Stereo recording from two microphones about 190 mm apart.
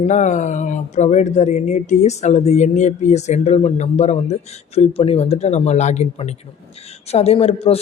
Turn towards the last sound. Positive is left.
turn(degrees=30)  # may be behind; listen again after turning